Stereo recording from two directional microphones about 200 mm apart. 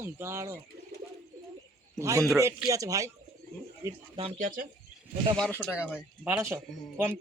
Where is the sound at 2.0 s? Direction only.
15° right (ahead or behind).